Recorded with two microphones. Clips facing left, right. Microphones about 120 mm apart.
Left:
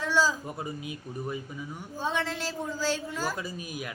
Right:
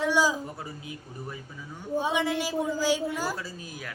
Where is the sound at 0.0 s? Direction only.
15° right (ahead or behind).